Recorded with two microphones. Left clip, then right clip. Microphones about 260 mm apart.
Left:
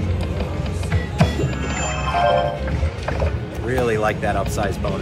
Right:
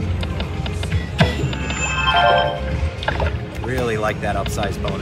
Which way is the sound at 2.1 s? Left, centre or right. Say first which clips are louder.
Right 2 dB; right.